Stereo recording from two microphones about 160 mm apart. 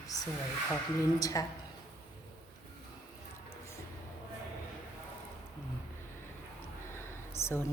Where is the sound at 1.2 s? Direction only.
20° left (ahead or behind).